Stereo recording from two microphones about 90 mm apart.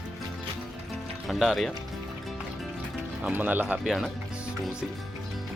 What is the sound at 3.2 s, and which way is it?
Speech, 20° right (ahead or behind).